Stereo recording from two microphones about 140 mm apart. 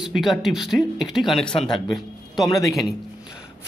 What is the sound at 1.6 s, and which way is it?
Speech, 35° left (ahead or behind).